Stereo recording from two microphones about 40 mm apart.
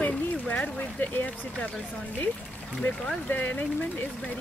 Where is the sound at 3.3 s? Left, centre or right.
Left.